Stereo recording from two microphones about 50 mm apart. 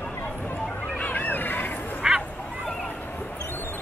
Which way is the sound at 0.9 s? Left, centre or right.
Left.